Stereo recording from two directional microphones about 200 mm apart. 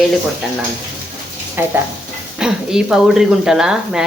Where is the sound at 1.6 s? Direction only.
10° right (ahead or behind).